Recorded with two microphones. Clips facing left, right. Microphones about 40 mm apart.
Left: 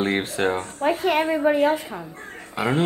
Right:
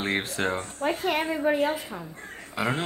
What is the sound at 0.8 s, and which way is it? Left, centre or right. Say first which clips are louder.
Speech: left 6 dB; left.